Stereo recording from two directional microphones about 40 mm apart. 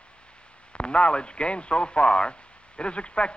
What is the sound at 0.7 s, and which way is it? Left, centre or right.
Speech, left.